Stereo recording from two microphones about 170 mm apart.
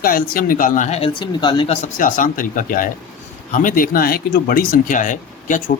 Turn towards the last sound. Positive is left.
turn(degrees=50)  # may be behind; listen again after turning